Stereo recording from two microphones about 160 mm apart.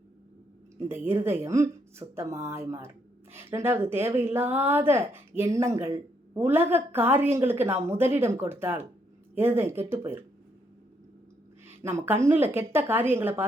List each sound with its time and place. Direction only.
0.8 s a woman's voice: 15° right (ahead or behind)
11.8 s a woman's voice: 15° right (ahead or behind)